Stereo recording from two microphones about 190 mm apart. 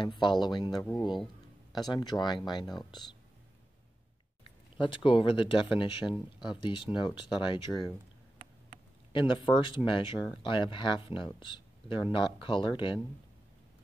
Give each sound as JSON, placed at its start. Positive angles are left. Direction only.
{"t": 0.0, "sound": "speech", "side_deg": 25}
{"t": 1.1, "sound": "a sound", "side_deg": 0}
{"t": 1.8, "sound": "speech", "side_deg": 20}
{"t": 4.7, "sound": "speech", "side_deg": 25}
{"t": 9.3, "sound": "speech", "side_deg": 25}